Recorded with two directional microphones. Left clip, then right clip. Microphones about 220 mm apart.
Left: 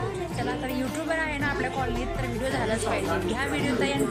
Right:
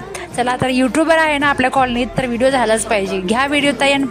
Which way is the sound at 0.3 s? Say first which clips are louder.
Right 17 dB; 45° right (ahead or behind).